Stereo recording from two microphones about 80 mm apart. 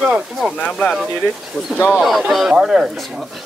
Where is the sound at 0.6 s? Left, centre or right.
Centre.